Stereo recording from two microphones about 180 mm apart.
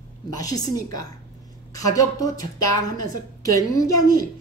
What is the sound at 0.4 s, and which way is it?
A woman's voice, 20° left (ahead or behind).